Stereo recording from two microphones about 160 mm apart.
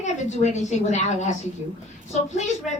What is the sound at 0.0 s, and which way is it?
A woman's voice, 45° left (ahead or behind).